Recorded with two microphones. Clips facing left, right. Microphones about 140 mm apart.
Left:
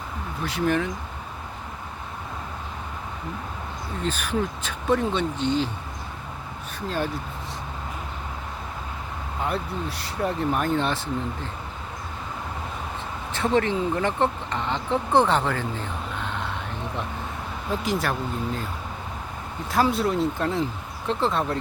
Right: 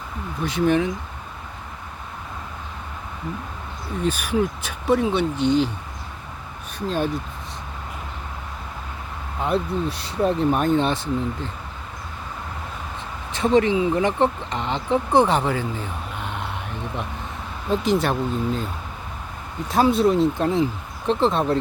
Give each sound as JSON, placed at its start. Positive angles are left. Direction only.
{"t": 0.4, "sound": "speech", "side_deg": -20}
{"t": 4.0, "sound": "speech", "side_deg": -10}
{"t": 6.7, "sound": "speech", "side_deg": -20}
{"t": 9.4, "sound": "speech", "side_deg": -20}
{"t": 13.3, "sound": "speech", "side_deg": -15}
{"t": 17.7, "sound": "speech", "side_deg": -25}
{"t": 19.7, "sound": "speech", "side_deg": -20}